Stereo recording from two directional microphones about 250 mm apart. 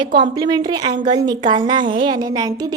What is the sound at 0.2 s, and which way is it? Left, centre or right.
A woman's voice, centre.